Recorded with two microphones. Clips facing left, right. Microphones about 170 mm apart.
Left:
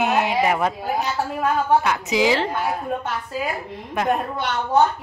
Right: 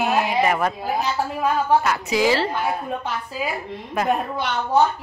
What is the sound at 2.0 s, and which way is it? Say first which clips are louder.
Speech: even; 15° left (ahead or behind).